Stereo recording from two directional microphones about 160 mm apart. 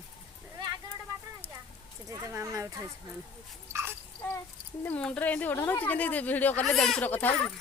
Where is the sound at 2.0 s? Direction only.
20° right (ahead or behind).